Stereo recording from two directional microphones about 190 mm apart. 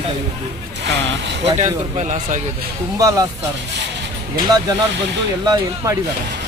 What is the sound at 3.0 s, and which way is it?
Speech, 15° right (ahead or behind).